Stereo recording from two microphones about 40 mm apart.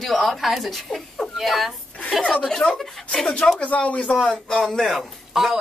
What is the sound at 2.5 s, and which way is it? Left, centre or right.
Speech, centre.